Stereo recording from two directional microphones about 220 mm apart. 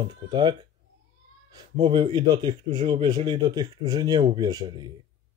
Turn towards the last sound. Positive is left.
turn(degrees=-20)  # may be behind; listen again after turning